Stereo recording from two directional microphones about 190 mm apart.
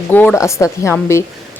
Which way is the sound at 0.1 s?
10° left (ahead or behind).